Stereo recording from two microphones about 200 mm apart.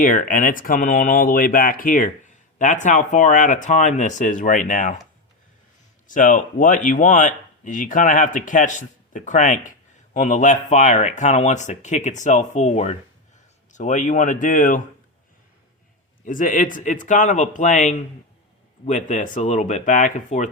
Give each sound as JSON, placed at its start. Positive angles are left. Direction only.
{"t": 0.0, "sound": "speech", "side_deg": 40}
{"t": 6.1, "sound": "speech", "side_deg": 40}
{"t": 16.2, "sound": "speech", "side_deg": 40}